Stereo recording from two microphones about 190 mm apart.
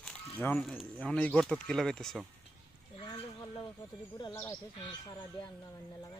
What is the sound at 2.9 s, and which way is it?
Speech, 25° left (ahead or behind).